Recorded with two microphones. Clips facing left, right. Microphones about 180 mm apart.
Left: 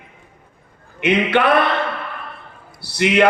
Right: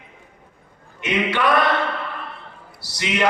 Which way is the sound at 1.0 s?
60° left (ahead or behind).